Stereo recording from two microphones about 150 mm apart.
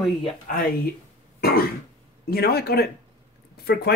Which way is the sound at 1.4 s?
90° left.